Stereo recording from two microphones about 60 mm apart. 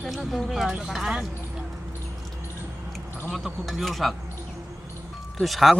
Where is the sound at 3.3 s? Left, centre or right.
Centre.